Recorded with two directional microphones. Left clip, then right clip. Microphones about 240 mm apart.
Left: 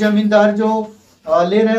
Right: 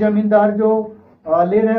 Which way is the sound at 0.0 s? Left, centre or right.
Left.